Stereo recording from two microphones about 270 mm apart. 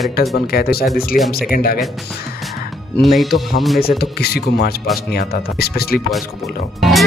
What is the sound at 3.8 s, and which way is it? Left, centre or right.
Speech, left.